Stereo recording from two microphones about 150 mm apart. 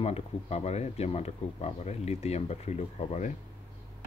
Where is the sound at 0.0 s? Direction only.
45° left (ahead or behind).